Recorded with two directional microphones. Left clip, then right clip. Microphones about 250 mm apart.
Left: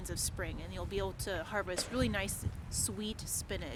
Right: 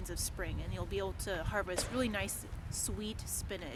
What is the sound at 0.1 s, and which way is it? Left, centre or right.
Speech, centre.